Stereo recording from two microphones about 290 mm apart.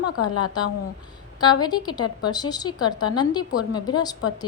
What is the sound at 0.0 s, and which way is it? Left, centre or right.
Speech, left.